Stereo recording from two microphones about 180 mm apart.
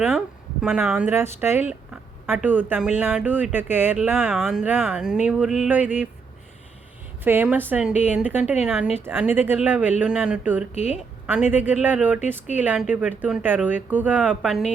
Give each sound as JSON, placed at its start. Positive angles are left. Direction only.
{"t": 0.6, "sound": "a woman's voice", "side_deg": -5}
{"t": 7.3, "sound": "a woman's voice", "side_deg": -10}
{"t": 10.8, "sound": "a woman's voice", "side_deg": 40}
{"t": 11.5, "sound": "a woman's voice", "side_deg": -10}